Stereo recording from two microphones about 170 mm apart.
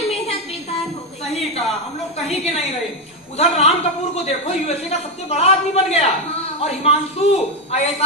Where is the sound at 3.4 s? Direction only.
40° left (ahead or behind).